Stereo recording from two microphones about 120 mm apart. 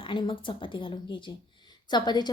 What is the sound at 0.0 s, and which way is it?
A woman's voice, 45° left (ahead or behind).